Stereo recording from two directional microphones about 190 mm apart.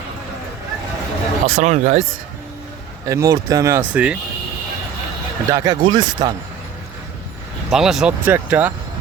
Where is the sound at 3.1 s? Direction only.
15° right (ahead or behind).